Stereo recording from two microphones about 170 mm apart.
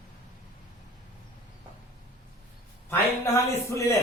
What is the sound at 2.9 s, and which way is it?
Speech, 15° left (ahead or behind).